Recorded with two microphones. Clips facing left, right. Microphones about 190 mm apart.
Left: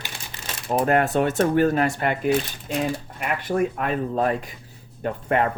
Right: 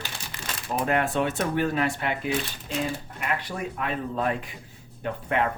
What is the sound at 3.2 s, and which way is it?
Speech, 50° left (ahead or behind).